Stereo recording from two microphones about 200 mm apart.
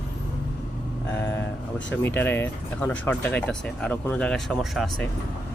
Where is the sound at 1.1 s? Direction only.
10° left (ahead or behind).